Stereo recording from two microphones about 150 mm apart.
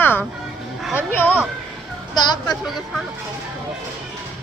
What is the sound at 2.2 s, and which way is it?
Speech, 30° left (ahead or behind).